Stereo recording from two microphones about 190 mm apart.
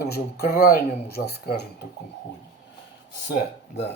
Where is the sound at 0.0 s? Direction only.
55° left (ahead or behind).